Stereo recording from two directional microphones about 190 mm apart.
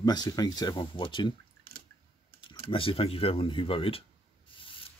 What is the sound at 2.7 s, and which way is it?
Speech, 30° left (ahead or behind).